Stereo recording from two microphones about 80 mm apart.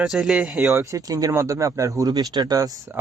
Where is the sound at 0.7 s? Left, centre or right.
Right.